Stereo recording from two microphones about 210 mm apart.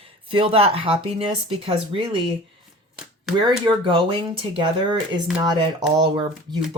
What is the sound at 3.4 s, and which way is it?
Speech, 20° right (ahead or behind).